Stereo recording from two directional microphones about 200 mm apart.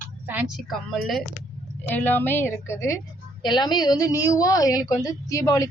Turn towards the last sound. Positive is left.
turn(degrees=15)  # may be behind; listen again after turning